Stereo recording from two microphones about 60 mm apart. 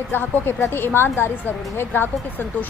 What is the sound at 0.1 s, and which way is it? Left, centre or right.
A woman's voice, left.